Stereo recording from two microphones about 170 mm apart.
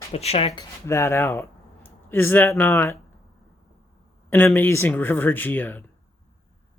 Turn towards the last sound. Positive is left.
turn(degrees=10)  # may be behind; listen again after turning